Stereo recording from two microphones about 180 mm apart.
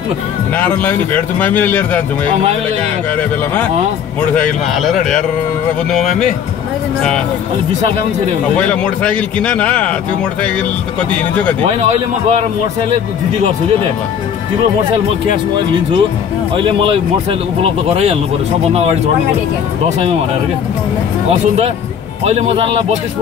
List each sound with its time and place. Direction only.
0.6 s speech: 10° left (ahead or behind)
4.4 s a man's voice: centre (ahead or behind)
8.5 s speech: 5° left (ahead or behind)
11.6 s speech: 40° right (ahead or behind)
15.5 s speech: 25° right (ahead or behind)
22.2 s speech: 35° right (ahead or behind)